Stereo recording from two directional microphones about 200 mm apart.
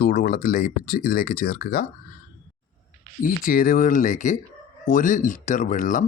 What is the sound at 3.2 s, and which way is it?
Speech, 45° left (ahead or behind).